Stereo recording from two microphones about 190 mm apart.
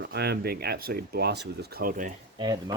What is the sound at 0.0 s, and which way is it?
Speech, 60° right (ahead or behind).